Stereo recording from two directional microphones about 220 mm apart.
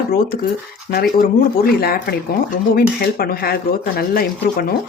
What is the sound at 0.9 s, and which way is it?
Speech, 40° left (ahead or behind).